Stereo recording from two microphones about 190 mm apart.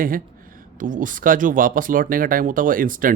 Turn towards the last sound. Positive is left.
turn(degrees=-45)  # may be behind; listen again after turning